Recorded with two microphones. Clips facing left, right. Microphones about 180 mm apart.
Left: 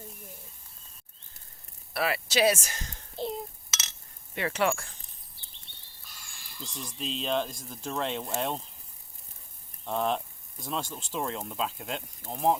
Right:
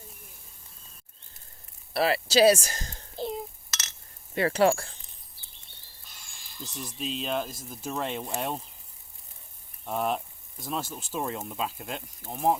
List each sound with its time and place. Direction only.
1.9 s speech: 30° right (ahead or behind)
3.2 s a sound: centre (ahead or behind)
4.4 s speech: 35° right (ahead or behind)
6.6 s speech: 5° right (ahead or behind)
9.8 s speech: 10° right (ahead or behind)